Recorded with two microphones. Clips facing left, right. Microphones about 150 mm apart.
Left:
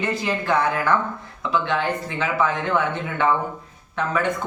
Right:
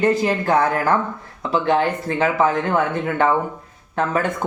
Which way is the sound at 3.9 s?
45° right (ahead or behind).